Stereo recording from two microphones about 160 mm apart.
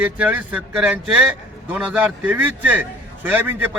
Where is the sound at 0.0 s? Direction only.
10° right (ahead or behind).